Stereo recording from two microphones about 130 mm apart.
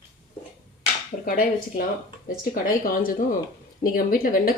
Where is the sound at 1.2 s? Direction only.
90° left.